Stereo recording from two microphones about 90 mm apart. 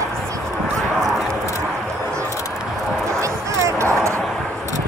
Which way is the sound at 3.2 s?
35° right (ahead or behind).